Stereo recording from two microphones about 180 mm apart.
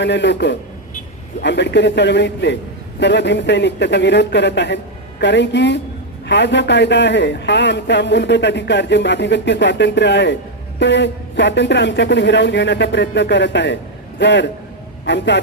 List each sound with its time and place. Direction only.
0.0 s a man's voice: 75° left (ahead or behind)